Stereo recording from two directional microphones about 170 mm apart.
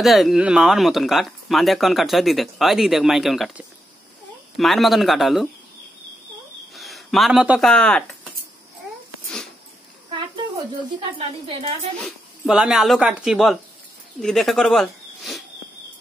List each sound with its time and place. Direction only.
0.0 s speech: centre (ahead or behind)
6.7 s speech: centre (ahead or behind)
11.1 s a woman's voice: 35° right (ahead or behind)
12.0 s speech: 5° right (ahead or behind)